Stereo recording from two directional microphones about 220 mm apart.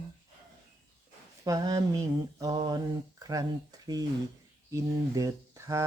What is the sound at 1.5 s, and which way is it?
Speech, 15° right (ahead or behind).